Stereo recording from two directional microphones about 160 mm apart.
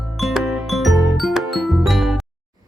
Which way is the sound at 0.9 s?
20° right (ahead or behind).